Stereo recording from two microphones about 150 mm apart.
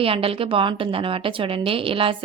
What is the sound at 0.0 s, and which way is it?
A woman's voice, 40° right (ahead or behind).